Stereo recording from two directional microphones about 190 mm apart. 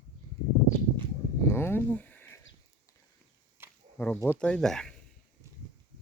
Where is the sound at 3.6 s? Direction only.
10° right (ahead or behind).